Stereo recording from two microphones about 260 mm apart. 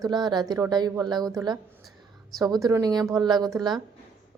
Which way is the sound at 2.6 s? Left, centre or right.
Centre.